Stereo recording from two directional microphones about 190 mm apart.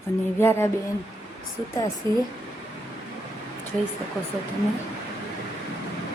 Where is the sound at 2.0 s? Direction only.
25° right (ahead or behind).